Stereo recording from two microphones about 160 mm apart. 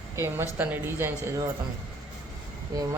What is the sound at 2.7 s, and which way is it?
Speech, 20° right (ahead or behind).